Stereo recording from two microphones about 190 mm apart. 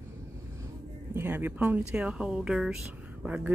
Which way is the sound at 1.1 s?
10° right (ahead or behind).